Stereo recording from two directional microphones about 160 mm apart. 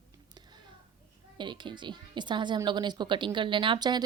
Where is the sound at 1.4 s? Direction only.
30° right (ahead or behind).